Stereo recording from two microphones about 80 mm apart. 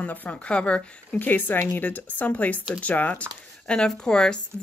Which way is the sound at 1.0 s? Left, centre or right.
Left.